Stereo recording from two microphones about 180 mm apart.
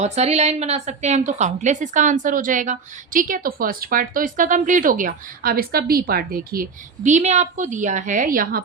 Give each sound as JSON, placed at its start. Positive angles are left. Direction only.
{"t": 0.0, "sound": "a woman's voice", "side_deg": -35}